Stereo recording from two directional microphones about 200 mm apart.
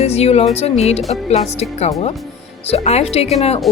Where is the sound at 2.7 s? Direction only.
30° left (ahead or behind).